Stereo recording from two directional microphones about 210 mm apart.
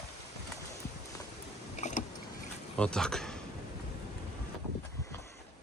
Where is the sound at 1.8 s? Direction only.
35° left (ahead or behind).